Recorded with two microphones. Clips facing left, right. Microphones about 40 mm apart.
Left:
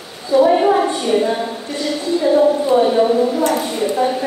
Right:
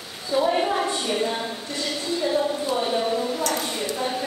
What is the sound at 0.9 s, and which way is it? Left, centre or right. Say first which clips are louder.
A woman's voice: left 8 dB; centre.